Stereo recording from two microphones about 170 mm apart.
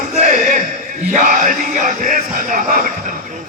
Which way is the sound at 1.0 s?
50° right (ahead or behind).